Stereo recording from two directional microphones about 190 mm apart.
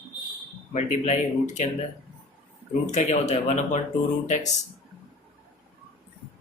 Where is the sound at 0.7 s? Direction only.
35° left (ahead or behind).